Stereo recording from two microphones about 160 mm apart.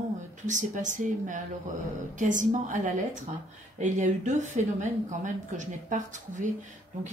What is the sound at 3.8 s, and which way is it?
A woman's voice, 50° right (ahead or behind).